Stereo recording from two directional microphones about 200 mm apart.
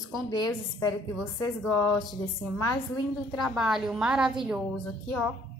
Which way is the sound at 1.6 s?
10° left (ahead or behind).